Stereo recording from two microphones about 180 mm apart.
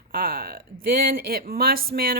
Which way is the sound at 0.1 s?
55° right (ahead or behind).